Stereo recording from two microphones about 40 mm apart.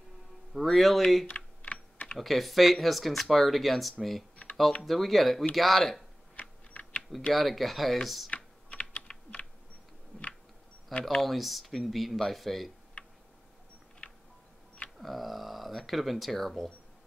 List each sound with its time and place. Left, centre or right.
0.5 s speech: centre
1.2 s typing: left
2.1 s speech: centre
4.4 s computer keyboard: left
4.8 s speech: centre
6.7 s typing: left
7.3 s speech: centre
8.6 s typing: left
10.1 s a sound: centre
10.9 s speech: left
11.1 s speech: centre
13.0 s tick-tock: left
15.0 s speech: centre